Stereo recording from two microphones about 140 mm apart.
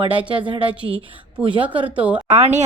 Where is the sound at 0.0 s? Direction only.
35° right (ahead or behind).